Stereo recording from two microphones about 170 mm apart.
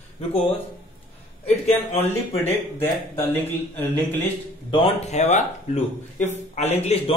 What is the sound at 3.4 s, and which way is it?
Speech, 10° left (ahead or behind).